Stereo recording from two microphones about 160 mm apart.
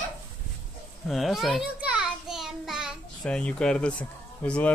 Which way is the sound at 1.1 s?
Centre (ahead or behind).